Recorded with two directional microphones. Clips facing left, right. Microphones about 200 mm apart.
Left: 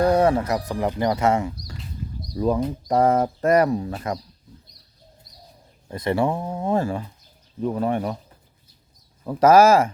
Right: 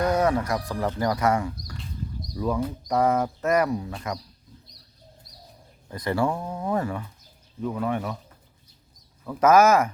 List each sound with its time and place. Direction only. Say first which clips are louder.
0.0 s speech: left 4 dB; 30° left (ahead or behind)
5.9 s speech: left 3 dB; 25° left (ahead or behind)
9.2 s speech: left 3 dB; 30° left (ahead or behind)